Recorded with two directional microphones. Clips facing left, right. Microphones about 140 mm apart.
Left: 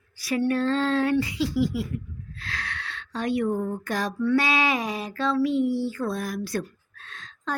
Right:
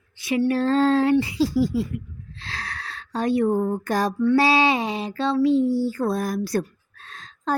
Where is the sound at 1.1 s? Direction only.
30° right (ahead or behind).